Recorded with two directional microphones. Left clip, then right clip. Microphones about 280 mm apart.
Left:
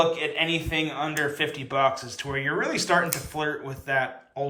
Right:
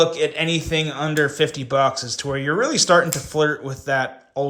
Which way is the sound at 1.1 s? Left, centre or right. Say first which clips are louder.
Right 7 dB; centre.